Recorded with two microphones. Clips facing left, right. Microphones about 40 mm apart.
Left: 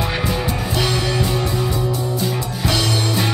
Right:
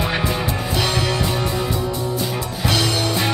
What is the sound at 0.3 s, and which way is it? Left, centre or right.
Music, centre.